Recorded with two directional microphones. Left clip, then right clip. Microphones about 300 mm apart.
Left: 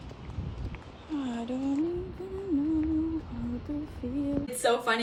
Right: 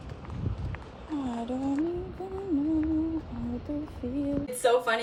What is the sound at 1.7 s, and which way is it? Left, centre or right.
Humming, centre.